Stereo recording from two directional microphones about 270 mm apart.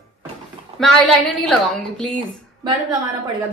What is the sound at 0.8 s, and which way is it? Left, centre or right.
Speech, centre.